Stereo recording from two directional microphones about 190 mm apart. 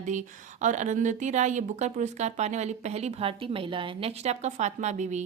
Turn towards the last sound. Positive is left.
turn(degrees=-40)  # may be behind; listen again after turning